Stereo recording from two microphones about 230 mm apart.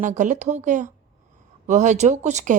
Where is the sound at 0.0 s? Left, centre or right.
Right.